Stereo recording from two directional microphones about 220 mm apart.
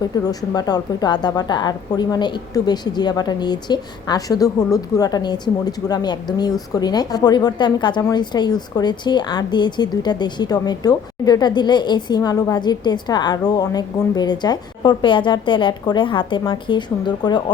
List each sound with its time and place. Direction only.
0.0 s a woman's voice: 15° left (ahead or behind)